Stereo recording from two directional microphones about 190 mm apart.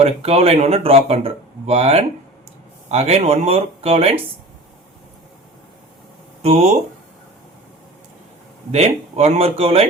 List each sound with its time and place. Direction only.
0.0 s speech: 35° right (ahead or behind)
6.4 s speech: 35° right (ahead or behind)
8.7 s speech: 35° right (ahead or behind)